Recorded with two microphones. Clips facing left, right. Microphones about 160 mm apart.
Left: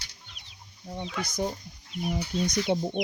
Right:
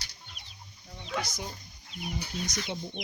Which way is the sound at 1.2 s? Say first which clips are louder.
Left 9 dB; 55° left (ahead or behind).